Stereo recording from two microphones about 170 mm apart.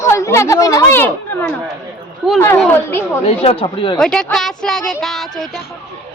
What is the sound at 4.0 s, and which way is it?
Speech, 5° left (ahead or behind).